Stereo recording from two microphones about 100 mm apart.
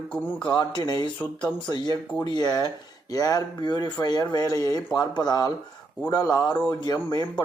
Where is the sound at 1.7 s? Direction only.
45° left (ahead or behind).